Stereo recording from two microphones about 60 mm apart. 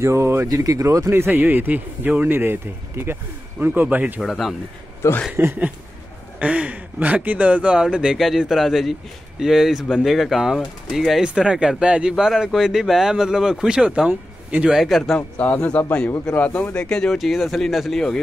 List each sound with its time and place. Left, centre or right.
0.0 s speech: right
0.5 s speech: right
1.1 s speech: right
4.2 s speech: centre
5.3 s speech: right
6.4 s speech: right
7.7 s speech: centre
14.8 s speech: centre
15.1 s speech: left
16.8 s speech: centre
17.2 s speech: centre